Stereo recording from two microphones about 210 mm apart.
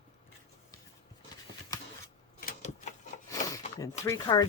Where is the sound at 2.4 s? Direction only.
35° left (ahead or behind).